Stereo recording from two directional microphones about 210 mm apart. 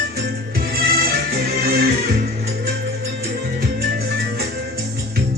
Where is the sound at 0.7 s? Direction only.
45° right (ahead or behind).